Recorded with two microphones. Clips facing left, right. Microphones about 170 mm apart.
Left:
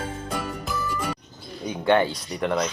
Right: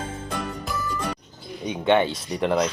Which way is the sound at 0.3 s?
5° left (ahead or behind).